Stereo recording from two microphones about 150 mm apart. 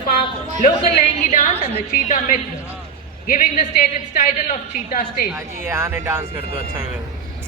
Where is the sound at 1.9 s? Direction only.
60° left (ahead or behind).